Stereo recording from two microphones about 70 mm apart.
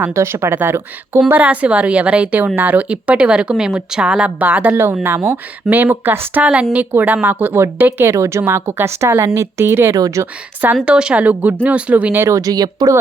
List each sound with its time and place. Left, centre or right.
0.1 s a woman's voice: right
1.3 s a woman's voice: right
5.0 s a woman's voice: right
6.4 s a woman's voice: centre
8.1 s a woman's voice: right
9.9 s speech: right
10.8 s speech: centre
12.1 s a woman's voice: right
12.4 s speech: right